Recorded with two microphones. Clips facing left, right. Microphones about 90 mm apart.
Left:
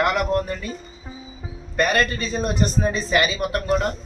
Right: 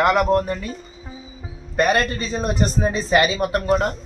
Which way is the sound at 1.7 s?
20° right (ahead or behind).